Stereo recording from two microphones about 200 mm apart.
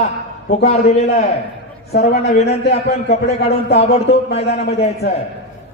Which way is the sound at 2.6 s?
55° left (ahead or behind).